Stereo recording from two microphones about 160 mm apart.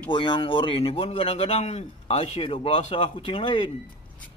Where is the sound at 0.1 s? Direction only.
30° left (ahead or behind).